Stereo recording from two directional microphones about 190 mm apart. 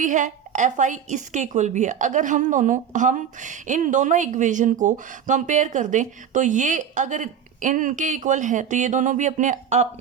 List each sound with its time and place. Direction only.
0.0 s a woman's voice: 40° right (ahead or behind)